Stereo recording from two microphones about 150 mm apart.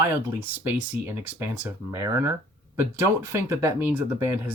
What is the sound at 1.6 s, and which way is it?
Speech, 15° right (ahead or behind).